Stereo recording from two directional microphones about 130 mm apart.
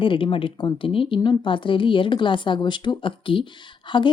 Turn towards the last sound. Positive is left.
turn(degrees=35)  # may be behind; listen again after turning